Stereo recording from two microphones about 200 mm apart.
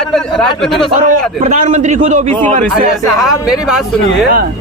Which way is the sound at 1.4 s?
40° right (ahead or behind).